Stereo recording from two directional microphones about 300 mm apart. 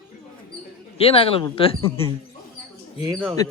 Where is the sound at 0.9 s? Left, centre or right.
Centre.